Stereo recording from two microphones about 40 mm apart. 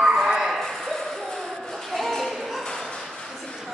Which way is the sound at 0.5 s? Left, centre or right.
Centre.